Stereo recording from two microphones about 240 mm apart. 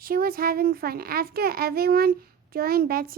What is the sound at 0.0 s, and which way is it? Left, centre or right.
Speech, right.